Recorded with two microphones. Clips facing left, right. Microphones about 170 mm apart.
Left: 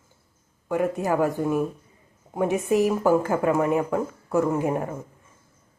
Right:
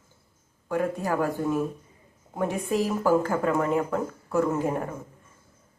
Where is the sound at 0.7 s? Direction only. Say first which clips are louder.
Left 3 dB; 15° left (ahead or behind).